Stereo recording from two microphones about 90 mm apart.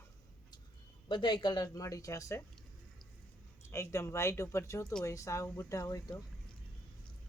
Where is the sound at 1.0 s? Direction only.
60° left (ahead or behind); by 2.4 s 35° left (ahead or behind).